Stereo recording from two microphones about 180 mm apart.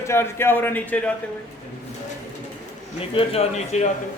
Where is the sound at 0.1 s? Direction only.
15° left (ahead or behind).